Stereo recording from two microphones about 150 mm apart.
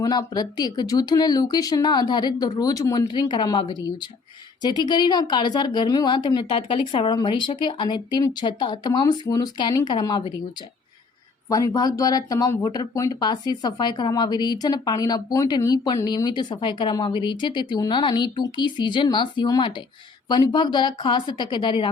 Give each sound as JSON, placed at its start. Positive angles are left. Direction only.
{"t": 0.0, "sound": "speech", "side_deg": 25}
{"t": 11.4, "sound": "a woman's voice", "side_deg": 25}